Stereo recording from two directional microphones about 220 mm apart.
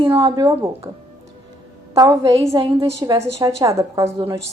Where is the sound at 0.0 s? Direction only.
25° right (ahead or behind).